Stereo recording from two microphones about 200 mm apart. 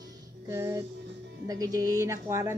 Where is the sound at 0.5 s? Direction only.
15° right (ahead or behind).